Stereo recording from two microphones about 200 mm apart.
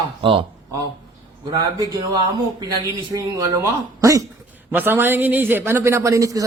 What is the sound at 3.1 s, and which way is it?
Speech, 15° right (ahead or behind).